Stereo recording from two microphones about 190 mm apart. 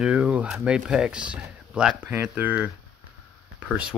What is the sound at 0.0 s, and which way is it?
Speech, 5° right (ahead or behind).